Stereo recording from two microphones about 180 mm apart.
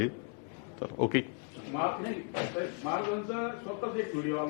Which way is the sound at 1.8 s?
25° left (ahead or behind).